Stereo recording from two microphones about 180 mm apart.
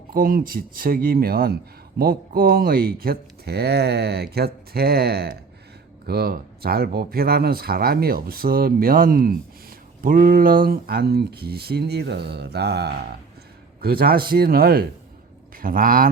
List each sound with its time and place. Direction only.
0.1 s speech: 50° right (ahead or behind)